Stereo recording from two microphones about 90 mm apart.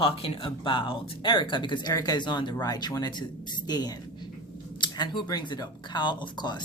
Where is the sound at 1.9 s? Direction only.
45° left (ahead or behind).